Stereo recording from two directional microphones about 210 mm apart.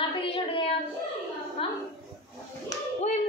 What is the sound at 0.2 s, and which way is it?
A woman's voice, 25° left (ahead or behind).